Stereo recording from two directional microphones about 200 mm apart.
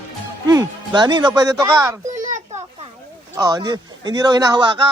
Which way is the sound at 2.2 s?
40° right (ahead or behind).